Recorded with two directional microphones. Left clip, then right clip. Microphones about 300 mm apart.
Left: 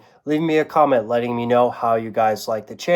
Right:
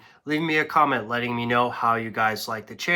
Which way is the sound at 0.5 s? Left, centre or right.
Right.